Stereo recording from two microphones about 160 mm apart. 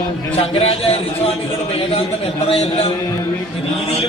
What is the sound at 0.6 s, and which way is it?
Speech, 40° left (ahead or behind).